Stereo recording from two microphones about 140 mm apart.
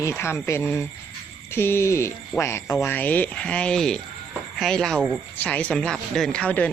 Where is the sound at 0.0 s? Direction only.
20° left (ahead or behind).